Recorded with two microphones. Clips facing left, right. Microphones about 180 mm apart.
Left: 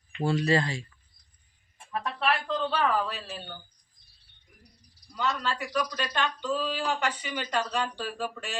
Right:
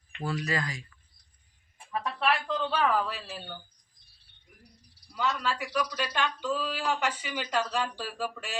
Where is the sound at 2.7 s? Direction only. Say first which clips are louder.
Right 1 dB; 5° right (ahead or behind).